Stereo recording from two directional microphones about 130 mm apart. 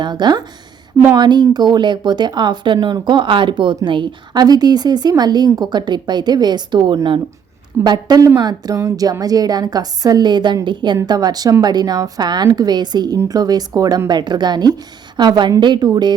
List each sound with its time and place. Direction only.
0.0 s a woman's voice: 35° right (ahead or behind)